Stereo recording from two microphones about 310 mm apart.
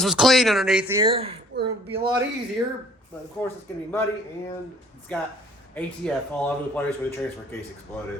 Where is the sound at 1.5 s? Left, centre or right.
Right.